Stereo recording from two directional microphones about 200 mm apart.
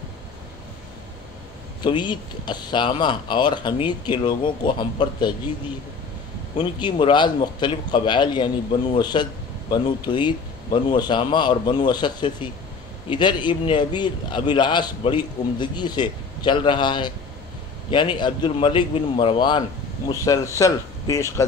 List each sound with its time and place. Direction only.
1.8 s a man's voice: 20° left (ahead or behind)
6.6 s a man's voice: 25° left (ahead or behind)